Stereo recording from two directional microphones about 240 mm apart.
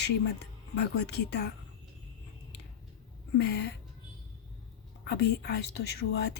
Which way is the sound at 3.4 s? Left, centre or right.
Left.